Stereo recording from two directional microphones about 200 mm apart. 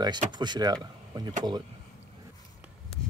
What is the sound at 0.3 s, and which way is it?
Speech, 20° right (ahead or behind).